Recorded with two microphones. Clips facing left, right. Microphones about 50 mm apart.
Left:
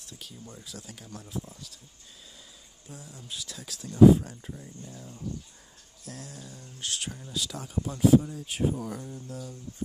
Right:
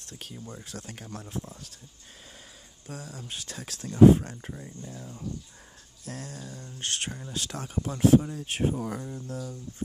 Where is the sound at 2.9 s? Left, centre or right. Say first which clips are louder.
Right 6 dB; right.